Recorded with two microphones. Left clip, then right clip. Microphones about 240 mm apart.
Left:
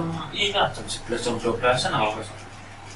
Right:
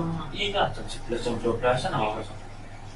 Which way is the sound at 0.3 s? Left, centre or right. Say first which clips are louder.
Left 4 dB; centre.